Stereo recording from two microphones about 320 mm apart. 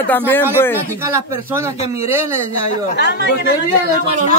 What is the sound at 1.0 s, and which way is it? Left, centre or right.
Speech, centre.